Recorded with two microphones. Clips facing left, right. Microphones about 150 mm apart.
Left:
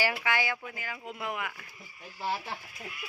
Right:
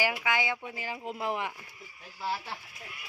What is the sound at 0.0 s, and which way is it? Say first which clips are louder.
A woman's voice: even; 10° right (ahead or behind).